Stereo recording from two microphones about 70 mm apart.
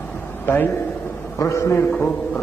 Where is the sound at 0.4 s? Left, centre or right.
Left.